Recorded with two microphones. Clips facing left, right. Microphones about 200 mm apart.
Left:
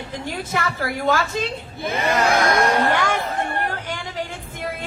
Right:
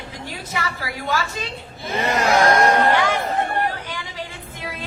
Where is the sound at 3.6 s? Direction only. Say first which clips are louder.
Even; 50° left (ahead or behind).